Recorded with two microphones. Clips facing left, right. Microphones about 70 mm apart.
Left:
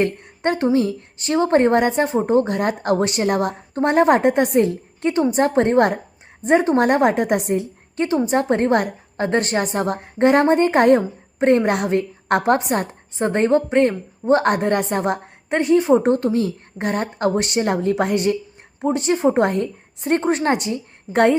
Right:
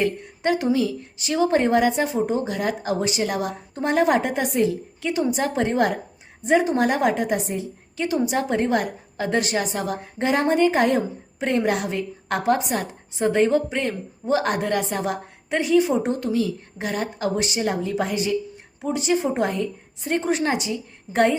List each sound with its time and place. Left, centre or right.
0.0 s a woman's voice: left
7.9 s a woman's voice: left